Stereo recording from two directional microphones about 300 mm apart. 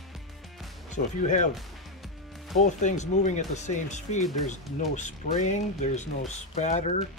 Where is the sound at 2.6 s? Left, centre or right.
Left.